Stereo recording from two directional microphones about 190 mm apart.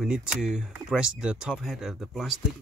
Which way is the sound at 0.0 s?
5° right (ahead or behind).